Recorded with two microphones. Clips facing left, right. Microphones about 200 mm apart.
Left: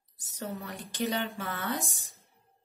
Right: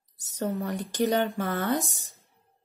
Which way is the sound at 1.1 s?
40° right (ahead or behind).